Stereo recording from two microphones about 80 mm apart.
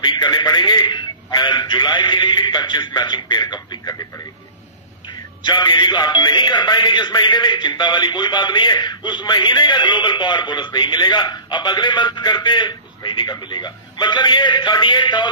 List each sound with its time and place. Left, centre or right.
0.0 s speech: left
5.5 s speech: left